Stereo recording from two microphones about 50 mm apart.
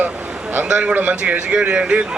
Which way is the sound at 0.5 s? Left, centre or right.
Right.